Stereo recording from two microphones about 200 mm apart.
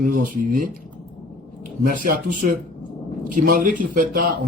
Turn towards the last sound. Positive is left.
turn(degrees=-40)  # may be behind; listen again after turning